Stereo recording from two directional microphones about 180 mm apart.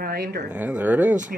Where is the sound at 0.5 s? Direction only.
10° right (ahead or behind).